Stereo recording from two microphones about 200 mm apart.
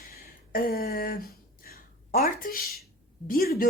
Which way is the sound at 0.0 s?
50° left (ahead or behind).